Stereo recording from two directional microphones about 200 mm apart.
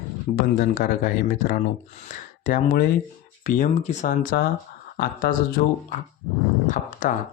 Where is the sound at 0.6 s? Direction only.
45° left (ahead or behind).